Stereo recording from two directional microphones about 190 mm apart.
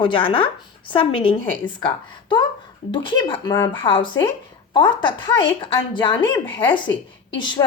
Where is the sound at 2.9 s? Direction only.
25° left (ahead or behind).